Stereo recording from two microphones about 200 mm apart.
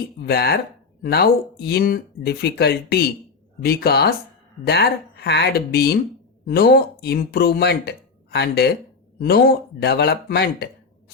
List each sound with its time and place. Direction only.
0.2 s speech: 50° left (ahead or behind)